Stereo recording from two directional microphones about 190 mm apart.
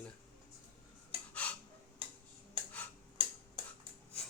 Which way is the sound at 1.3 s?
5° left (ahead or behind).